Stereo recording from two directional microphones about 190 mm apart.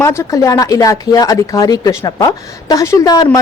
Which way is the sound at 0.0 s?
15° left (ahead or behind).